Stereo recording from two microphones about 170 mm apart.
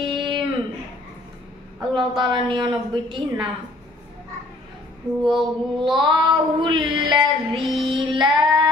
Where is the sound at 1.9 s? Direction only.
25° right (ahead or behind).